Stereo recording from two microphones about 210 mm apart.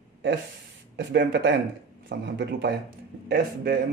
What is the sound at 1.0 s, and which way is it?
A man's voice, 55° right (ahead or behind).